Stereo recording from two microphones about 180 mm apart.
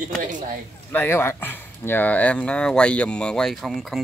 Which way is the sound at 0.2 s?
45° right (ahead or behind).